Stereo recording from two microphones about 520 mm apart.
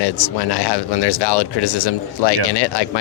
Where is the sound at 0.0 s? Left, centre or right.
Left.